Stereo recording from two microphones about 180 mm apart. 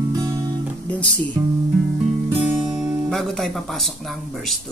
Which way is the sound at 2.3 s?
5° right (ahead or behind).